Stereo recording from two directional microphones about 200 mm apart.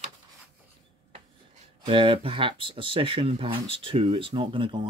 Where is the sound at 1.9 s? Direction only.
25° right (ahead or behind).